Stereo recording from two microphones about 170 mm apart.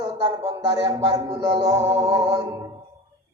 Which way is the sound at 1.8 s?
35° right (ahead or behind).